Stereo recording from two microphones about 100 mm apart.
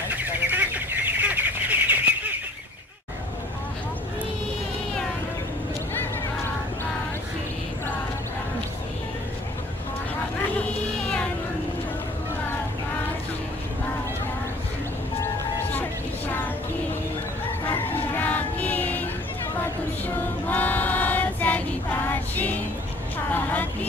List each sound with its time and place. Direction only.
0.1 s bird: 20° right (ahead or behind)
17.6 s a sound: 20° left (ahead or behind)
20.4 s child singing: 15° left (ahead or behind)
23.3 s vehicle: 15° left (ahead or behind)